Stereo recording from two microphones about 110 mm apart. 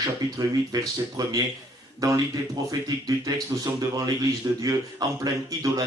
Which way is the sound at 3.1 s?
35° right (ahead or behind).